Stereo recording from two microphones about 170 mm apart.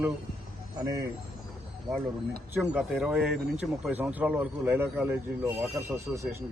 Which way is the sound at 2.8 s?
5° right (ahead or behind).